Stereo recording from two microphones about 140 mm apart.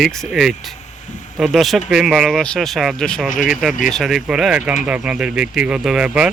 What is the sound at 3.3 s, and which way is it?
Speech, 70° left (ahead or behind).